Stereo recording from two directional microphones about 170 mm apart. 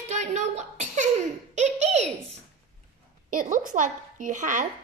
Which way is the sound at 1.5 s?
40° right (ahead or behind).